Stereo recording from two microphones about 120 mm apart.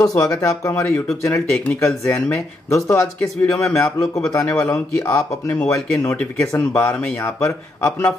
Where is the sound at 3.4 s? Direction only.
25° left (ahead or behind).